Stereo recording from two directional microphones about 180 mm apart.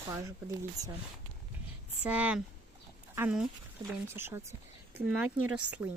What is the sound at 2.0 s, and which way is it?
Speech, 10° right (ahead or behind).